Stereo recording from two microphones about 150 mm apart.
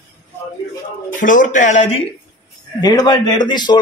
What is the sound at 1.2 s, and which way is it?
Speech, 60° left (ahead or behind).